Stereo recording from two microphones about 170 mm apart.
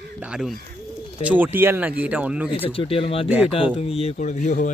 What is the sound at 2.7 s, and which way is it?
Speech, 35° left (ahead or behind).